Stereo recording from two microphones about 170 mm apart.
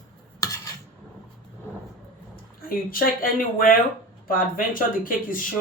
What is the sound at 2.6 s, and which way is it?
Speech, 55° left (ahead or behind).